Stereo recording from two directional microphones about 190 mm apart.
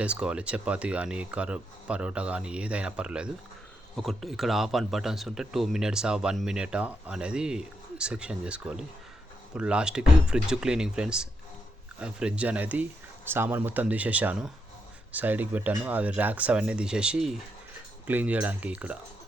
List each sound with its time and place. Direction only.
0.0 s speech: 5° right (ahead or behind)